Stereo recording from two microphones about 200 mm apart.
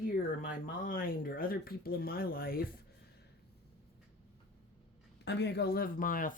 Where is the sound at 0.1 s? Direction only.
45° left (ahead or behind).